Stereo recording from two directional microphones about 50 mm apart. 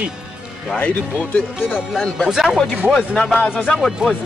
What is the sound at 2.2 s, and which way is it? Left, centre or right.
Speech, centre.